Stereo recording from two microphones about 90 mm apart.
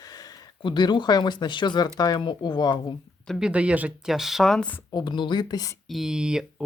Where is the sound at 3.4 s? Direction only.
15° right (ahead or behind).